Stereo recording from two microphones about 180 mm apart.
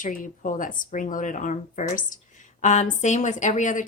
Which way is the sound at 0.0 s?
45° left (ahead or behind).